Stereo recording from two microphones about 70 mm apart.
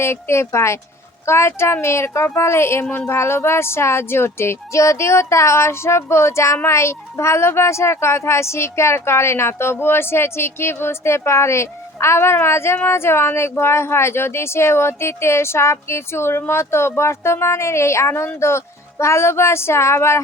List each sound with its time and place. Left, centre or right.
0.0 s a child's voice: left